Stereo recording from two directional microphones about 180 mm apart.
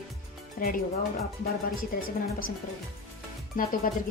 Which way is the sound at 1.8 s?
50° left (ahead or behind).